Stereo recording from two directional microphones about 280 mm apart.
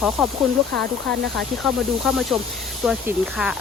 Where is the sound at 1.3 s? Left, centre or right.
Centre.